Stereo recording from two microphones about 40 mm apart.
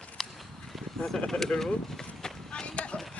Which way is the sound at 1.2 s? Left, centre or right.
Centre.